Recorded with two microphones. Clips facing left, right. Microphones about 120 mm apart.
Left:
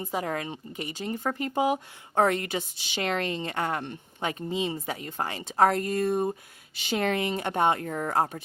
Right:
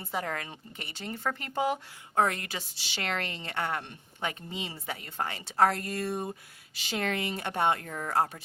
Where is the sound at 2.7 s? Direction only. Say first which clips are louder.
Left 3 dB; 20° left (ahead or behind).